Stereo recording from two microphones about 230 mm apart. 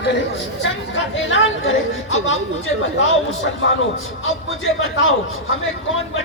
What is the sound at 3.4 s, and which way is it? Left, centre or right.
A man's voice, left.